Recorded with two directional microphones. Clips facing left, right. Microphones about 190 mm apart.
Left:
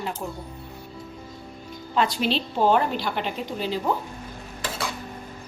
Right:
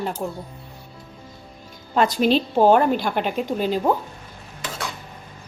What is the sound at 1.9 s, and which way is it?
A woman's voice, 45° right (ahead or behind).